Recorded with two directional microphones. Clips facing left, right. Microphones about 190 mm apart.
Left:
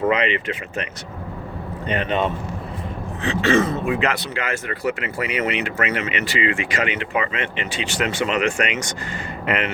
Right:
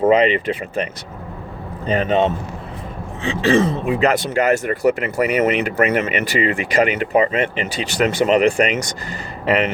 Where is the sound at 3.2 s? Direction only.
30° right (ahead or behind).